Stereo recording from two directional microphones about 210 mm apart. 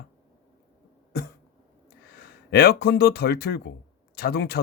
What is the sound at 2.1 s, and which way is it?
Speech, 50° left (ahead or behind).